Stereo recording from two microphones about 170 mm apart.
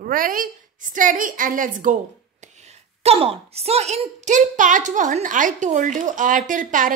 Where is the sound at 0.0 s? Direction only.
55° right (ahead or behind).